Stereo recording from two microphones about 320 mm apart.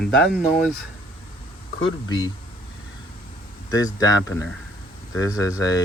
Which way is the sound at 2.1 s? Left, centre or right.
Centre.